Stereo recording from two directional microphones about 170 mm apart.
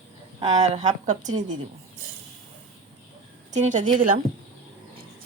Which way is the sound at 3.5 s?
45° right (ahead or behind).